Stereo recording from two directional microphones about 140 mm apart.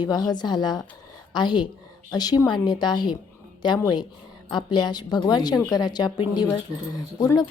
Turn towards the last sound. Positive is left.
turn(degrees=25)  # may be behind; listen again after turning